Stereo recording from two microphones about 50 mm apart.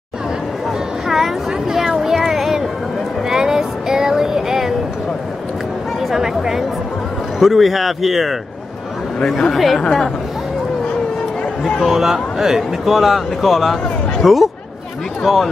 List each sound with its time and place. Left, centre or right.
1.0 s a sound: centre
6.1 s speech: centre
9.2 s speech: centre
11.6 s speech: centre